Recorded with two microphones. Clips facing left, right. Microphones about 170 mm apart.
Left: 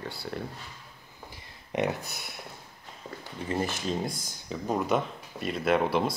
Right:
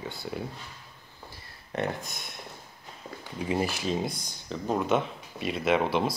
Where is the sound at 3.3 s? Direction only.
10° right (ahead or behind).